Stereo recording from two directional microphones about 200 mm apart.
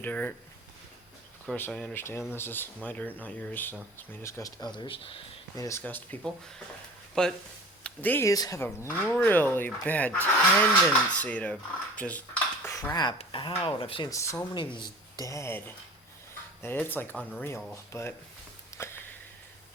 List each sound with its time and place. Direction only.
0.0 s speech: 5° left (ahead or behind)
1.5 s speech: 10° left (ahead or behind)
4.8 s speech: 25° left (ahead or behind)
5.6 s speech: 10° left (ahead or behind)
14.1 s speech: 15° left (ahead or behind)
18.7 s a sound: 15° left (ahead or behind)